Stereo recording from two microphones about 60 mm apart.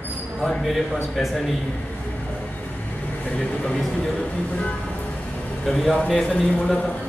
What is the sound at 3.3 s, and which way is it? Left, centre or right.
Speech, centre.